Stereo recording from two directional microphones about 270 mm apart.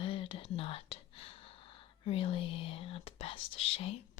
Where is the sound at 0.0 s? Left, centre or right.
Centre.